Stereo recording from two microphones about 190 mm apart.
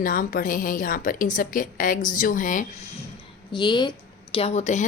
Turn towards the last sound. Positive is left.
turn(degrees=35)  # may be behind; listen again after turning